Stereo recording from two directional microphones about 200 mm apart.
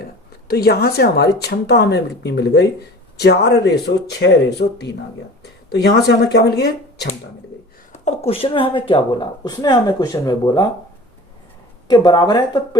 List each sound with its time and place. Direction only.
0.0 s a woman's voice: 50° left (ahead or behind)
5.4 s a sound: 55° left (ahead or behind)
6.1 s speech: 55° left (ahead or behind)
7.9 s speech: 35° left (ahead or behind)
11.9 s speech: 20° left (ahead or behind)